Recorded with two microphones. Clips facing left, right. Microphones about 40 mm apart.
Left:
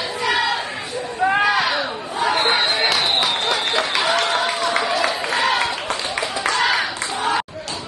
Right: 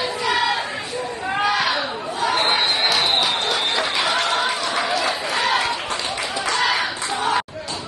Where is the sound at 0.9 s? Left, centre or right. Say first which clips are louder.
Even; right.